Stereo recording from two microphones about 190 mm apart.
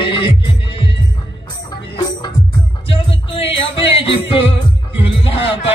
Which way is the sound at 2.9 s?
30° left (ahead or behind).